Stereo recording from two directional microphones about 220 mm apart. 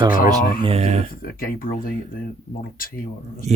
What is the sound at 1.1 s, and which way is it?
Speech, 40° left (ahead or behind).